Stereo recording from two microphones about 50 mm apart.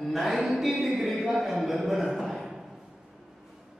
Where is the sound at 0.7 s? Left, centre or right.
Centre.